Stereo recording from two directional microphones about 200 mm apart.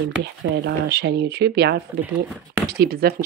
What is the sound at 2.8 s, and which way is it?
Speech, 50° right (ahead or behind).